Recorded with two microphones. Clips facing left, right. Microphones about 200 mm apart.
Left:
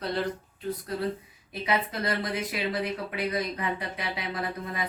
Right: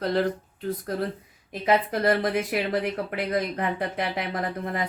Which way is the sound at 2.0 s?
60° right (ahead or behind).